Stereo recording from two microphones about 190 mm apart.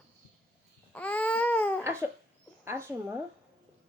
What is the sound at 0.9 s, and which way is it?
Baby cry, 10° left (ahead or behind).